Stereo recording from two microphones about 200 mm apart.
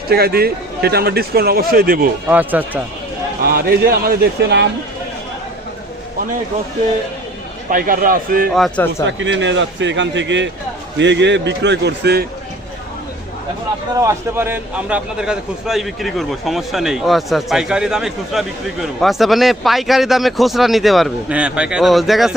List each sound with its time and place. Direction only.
0.1 s a man's voice: 50° right (ahead or behind)
2.2 s speech: 10° right (ahead or behind)
3.4 s a man's voice: 50° right (ahead or behind)
7.7 s a man's voice: 45° right (ahead or behind)
8.5 s speech: 5° left (ahead or behind)
9.0 s a man's voice: 65° right (ahead or behind)
14.0 s a man's voice: 15° right (ahead or behind)